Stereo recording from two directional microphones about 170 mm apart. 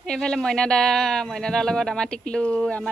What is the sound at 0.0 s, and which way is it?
Speech, 5° left (ahead or behind).